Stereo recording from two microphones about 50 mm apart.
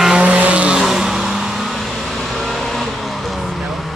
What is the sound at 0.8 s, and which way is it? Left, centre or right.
Vehicle, centre.